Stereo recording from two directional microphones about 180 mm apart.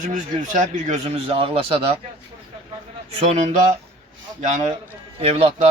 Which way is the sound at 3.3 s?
40° right (ahead or behind).